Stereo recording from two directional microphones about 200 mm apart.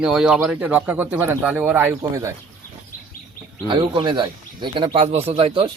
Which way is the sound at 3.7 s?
25° right (ahead or behind).